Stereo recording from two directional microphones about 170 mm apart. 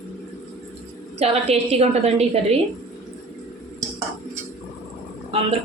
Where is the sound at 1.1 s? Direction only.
35° right (ahead or behind).